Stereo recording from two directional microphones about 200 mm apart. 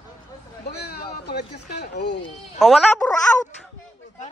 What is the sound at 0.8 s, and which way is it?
Speech, 55° left (ahead or behind).